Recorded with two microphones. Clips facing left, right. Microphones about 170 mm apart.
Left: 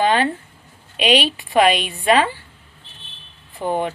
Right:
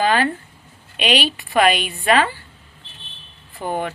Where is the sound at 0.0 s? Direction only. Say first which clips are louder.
Left 1 dB; 25° left (ahead or behind).